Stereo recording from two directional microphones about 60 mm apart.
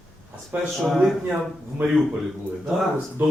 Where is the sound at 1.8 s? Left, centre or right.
Right.